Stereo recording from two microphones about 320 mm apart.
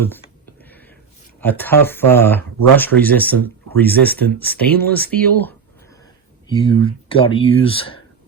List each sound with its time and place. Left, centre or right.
0.6 s a sound: centre
1.4 s speech: centre
6.7 s speech: centre